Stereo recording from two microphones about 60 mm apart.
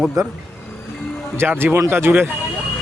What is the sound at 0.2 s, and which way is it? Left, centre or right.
Speech, right.